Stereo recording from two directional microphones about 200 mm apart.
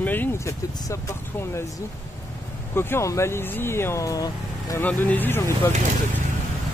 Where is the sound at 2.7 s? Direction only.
15° left (ahead or behind).